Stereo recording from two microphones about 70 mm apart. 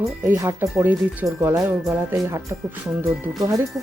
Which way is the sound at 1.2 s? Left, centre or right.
Right.